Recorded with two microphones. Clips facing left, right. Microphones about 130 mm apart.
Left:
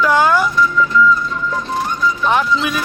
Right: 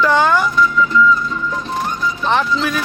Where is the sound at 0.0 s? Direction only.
5° left (ahead or behind).